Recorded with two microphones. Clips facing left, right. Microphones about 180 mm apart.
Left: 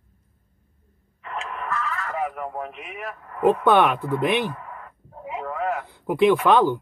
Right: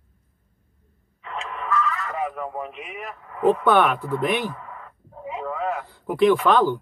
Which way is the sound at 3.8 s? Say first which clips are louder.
Left 1 dB; 10° left (ahead or behind).